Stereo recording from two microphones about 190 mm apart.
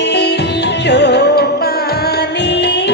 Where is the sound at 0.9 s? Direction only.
60° left (ahead or behind).